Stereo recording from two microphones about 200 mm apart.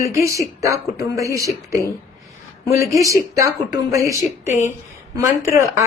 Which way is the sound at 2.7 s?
15° right (ahead or behind).